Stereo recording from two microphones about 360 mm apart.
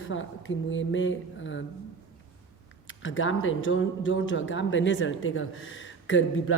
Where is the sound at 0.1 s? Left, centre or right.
Left.